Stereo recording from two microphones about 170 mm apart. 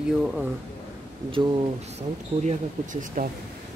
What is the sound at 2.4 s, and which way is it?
Speech, 50° right (ahead or behind).